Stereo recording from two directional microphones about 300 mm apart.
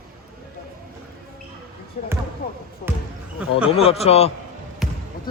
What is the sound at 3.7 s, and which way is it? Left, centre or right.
Speech, centre.